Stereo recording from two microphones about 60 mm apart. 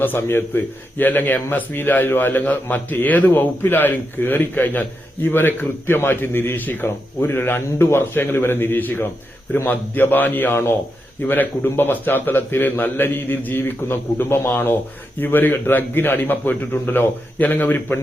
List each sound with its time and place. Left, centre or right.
0.2 s a man's voice: left